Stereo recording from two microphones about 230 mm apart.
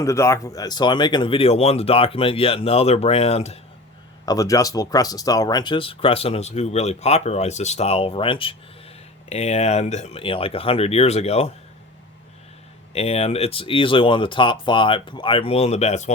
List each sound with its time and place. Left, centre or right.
0.0 s speech: centre
4.3 s speech: centre
12.9 s speech: left